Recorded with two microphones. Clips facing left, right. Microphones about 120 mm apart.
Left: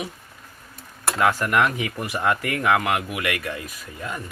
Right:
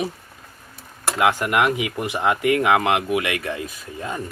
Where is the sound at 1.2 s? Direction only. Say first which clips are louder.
Right 1 dB; 15° right (ahead or behind).